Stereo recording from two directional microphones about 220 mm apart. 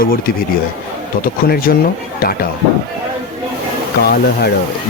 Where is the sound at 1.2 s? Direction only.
40° left (ahead or behind).